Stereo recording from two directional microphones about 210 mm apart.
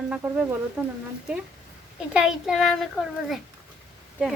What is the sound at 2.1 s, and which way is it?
Speech, 5° right (ahead or behind).